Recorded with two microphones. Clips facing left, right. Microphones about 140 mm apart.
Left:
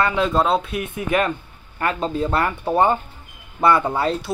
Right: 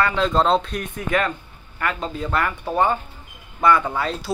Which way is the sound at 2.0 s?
30° left (ahead or behind).